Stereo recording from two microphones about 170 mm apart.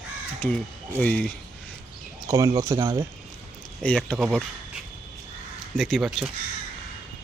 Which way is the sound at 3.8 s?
10° left (ahead or behind).